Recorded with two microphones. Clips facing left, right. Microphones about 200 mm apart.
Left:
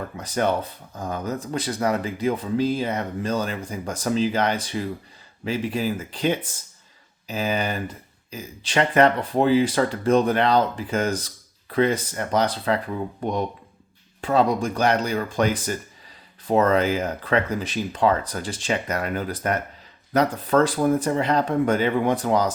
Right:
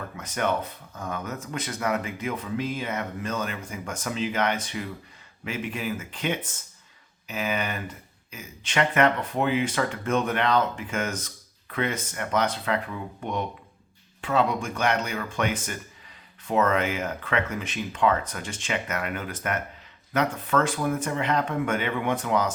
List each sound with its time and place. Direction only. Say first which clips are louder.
0.2 s speech: left 4 dB; 35° left (ahead or behind)